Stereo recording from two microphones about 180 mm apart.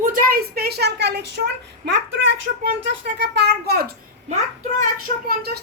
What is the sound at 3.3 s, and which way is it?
A child's voice, 60° right (ahead or behind).